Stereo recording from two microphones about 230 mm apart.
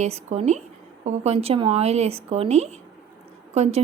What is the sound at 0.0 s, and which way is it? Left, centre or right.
A woman's voice, right.